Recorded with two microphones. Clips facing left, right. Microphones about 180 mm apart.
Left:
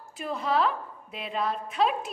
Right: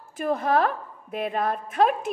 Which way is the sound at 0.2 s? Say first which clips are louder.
Right 4 dB; 50° right (ahead or behind).